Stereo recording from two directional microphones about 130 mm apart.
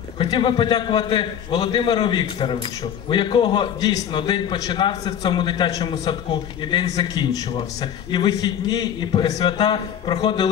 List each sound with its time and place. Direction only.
0.2 s a man's voice: 40° left (ahead or behind)